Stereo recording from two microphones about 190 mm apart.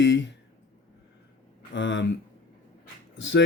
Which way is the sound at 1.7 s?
70° left (ahead or behind).